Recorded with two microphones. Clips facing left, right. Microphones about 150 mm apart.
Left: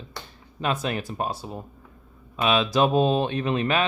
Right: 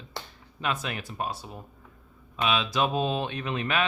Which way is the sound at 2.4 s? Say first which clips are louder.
Left 5 dB; 45° left (ahead or behind).